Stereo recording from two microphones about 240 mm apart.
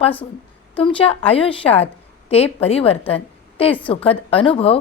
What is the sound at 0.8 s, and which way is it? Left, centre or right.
A woman's voice, left.